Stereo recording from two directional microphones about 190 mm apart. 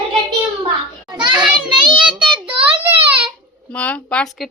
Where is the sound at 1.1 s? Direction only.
25° right (ahead or behind).